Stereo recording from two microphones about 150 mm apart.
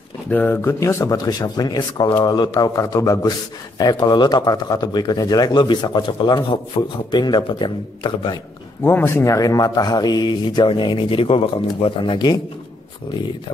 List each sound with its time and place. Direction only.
0.3 s speech: 15° left (ahead or behind); by 8.4 s 30° left (ahead or behind)
8.8 s speech: 15° left (ahead or behind); by 12.4 s 30° left (ahead or behind)